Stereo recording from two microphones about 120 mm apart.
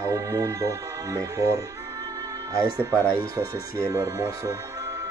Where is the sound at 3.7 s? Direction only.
25° right (ahead or behind).